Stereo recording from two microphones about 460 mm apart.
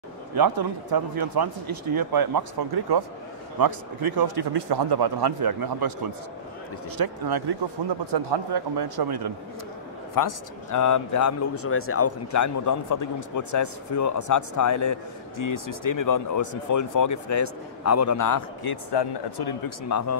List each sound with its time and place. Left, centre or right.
0.3 s a man's voice: right
7.0 s a man's voice: right
10.1 s a man's voice: left
19.9 s a man's voice: left